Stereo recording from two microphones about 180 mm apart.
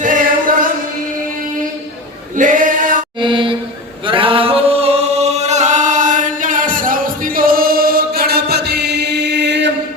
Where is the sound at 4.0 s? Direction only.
30° right (ahead or behind); by 9.7 s 75° right (ahead or behind).